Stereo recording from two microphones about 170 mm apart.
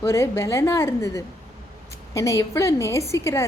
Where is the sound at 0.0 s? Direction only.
15° left (ahead or behind).